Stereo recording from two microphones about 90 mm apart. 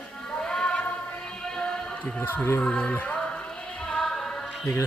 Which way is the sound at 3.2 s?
10° left (ahead or behind).